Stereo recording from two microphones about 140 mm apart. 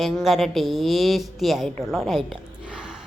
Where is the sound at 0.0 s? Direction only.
Centre (ahead or behind).